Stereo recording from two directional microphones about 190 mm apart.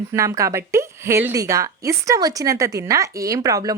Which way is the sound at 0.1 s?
15° right (ahead or behind).